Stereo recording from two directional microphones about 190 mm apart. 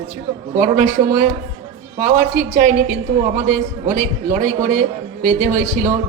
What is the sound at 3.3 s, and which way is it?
A man's voice, 40° right (ahead or behind).